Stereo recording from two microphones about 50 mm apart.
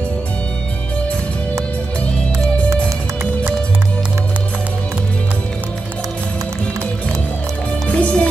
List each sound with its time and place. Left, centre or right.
7.9 s music: left